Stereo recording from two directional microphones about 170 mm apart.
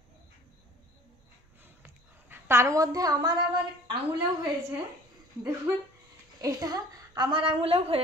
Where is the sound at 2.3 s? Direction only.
15° right (ahead or behind).